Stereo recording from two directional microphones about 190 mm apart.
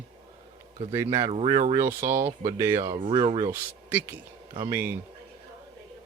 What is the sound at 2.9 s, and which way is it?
Speech, 25° right (ahead or behind).